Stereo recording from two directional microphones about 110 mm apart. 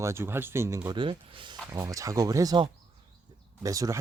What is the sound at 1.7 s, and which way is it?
Speech, 30° right (ahead or behind).